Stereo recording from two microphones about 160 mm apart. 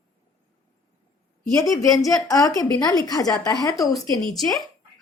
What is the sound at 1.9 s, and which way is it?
A woman's voice, 20° left (ahead or behind).